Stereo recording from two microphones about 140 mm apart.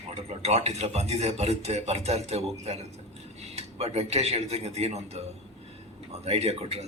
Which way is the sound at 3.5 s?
50° right (ahead or behind).